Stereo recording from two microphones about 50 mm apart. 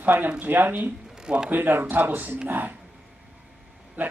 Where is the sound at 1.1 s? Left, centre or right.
Centre.